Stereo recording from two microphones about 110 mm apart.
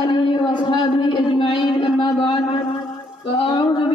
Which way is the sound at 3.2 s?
50° left (ahead or behind).